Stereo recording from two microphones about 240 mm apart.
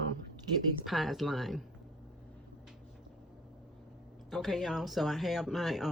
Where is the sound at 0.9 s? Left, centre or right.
Centre.